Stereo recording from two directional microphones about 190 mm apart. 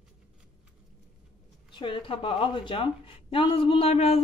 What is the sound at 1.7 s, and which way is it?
Speech, 25° left (ahead or behind).